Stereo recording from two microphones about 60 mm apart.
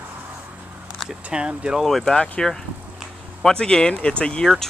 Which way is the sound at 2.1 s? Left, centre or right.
Centre.